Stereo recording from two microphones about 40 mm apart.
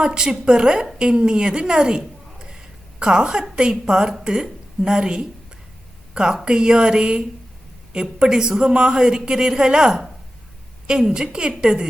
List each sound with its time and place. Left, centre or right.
0.0 s speech: centre